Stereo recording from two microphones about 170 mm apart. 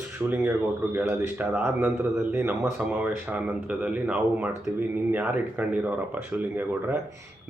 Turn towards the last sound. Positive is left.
turn(degrees=-10)  # may be behind; listen again after turning